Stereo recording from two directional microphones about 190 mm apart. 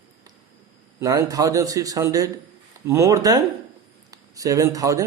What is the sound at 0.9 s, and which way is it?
Speech, 15° right (ahead or behind).